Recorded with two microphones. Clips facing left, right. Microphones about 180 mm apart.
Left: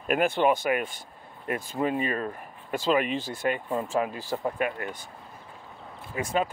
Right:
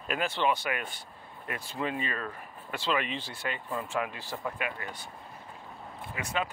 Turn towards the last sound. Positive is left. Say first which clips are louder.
# left 6 dB
turn(degrees=40)  # may be behind; listen again after turning